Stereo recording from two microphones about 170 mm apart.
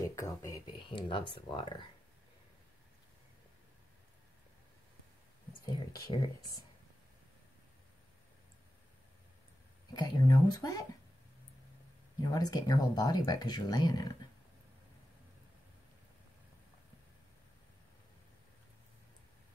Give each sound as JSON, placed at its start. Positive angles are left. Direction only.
{"t": 0.0, "sound": "speech", "side_deg": 20}
{"t": 5.7, "sound": "speech", "side_deg": 20}
{"t": 9.9, "sound": "speech", "side_deg": 25}
{"t": 12.2, "sound": "speech", "side_deg": 20}